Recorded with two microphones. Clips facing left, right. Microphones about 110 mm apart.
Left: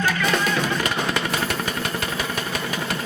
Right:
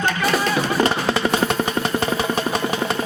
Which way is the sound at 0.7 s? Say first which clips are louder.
Right 5 dB; 30° right (ahead or behind).